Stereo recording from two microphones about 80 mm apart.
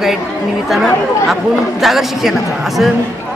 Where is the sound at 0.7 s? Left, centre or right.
Centre.